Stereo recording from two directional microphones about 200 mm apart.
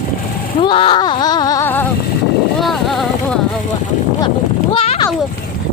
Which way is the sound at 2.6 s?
Centre (ahead or behind).